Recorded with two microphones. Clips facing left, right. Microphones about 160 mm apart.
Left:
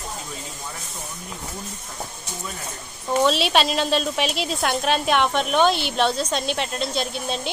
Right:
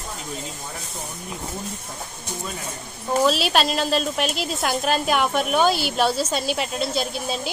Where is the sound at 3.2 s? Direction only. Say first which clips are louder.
Even; centre (ahead or behind).